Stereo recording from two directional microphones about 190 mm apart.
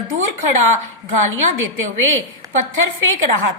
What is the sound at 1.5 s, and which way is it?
Speech, 90° right.